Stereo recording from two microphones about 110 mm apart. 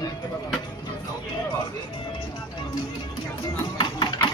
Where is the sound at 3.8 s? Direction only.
40° left (ahead or behind).